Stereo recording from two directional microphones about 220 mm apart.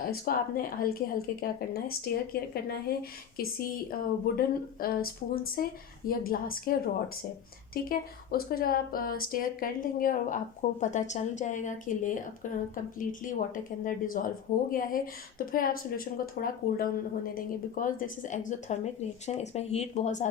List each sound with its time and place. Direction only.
0.0 s a woman's voice: 40° left (ahead or behind)